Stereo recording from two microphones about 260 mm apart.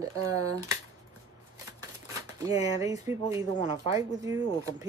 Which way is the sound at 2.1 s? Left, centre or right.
Centre.